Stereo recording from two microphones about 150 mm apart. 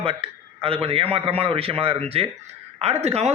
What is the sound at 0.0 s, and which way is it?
A man's voice, 40° right (ahead or behind).